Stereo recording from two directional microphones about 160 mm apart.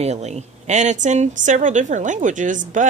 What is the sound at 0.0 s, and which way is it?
A woman's voice, 45° right (ahead or behind).